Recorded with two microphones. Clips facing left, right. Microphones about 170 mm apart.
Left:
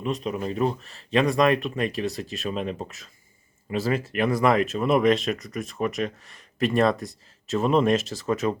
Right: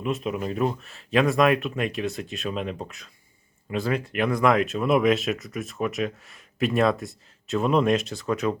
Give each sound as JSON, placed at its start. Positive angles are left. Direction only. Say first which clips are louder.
{"t": 0.0, "sound": "speech", "louder": "even", "side_deg": -5}